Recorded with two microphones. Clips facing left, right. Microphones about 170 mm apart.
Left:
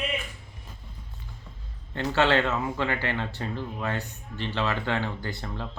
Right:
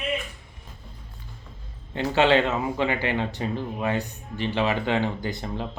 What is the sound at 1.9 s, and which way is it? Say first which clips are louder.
Speech: right 3 dB; 15° right (ahead or behind).